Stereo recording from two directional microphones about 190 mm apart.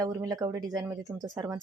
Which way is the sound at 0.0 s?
20° right (ahead or behind).